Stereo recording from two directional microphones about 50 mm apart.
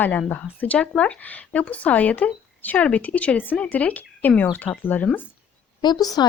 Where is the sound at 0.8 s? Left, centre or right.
Left.